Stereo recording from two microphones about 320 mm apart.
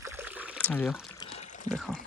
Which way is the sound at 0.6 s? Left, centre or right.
Centre.